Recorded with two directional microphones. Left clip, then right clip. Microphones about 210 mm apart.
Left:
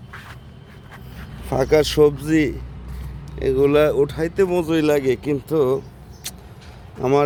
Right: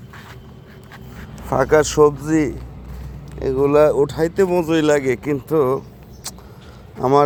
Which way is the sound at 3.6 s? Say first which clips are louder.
Right 3 dB; 15° left (ahead or behind).